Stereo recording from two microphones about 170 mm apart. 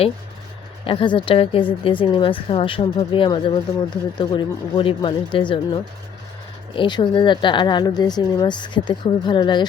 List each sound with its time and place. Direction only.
0.9 s speech: 30° left (ahead or behind)